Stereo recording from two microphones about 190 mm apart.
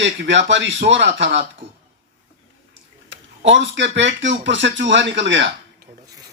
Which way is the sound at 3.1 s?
70° right (ahead or behind).